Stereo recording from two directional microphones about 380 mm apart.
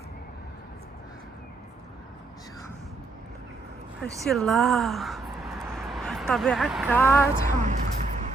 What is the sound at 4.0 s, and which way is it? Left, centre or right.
Speech, centre.